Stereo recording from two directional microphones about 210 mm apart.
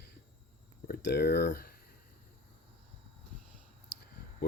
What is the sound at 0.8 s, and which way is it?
Speech, 50° left (ahead or behind).